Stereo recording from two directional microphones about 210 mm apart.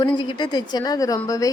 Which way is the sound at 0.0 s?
20° left (ahead or behind).